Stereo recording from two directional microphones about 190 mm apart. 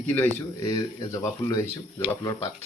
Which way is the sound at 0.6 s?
20° left (ahead or behind).